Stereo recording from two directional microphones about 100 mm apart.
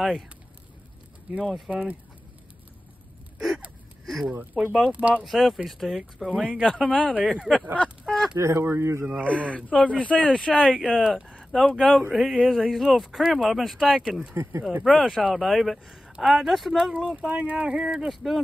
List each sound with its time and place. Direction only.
1.3 s speech: centre (ahead or behind)
1.7 s speech: 15° right (ahead or behind)
3.3 s gasp: 10° right (ahead or behind)
4.0 s a sound: centre (ahead or behind)
4.7 s speech: 10° right (ahead or behind)
5.2 s speech: centre (ahead or behind)
6.8 s speech: 10° left (ahead or behind)
7.2 s speech: 5° right (ahead or behind)
8.4 s speech: 30° right (ahead or behind)
9.2 s speech: 10° left (ahead or behind)
11.1 s speech: 5° right (ahead or behind)
14.3 s speech: 30° right (ahead or behind)
14.7 s speech: 10° right (ahead or behind)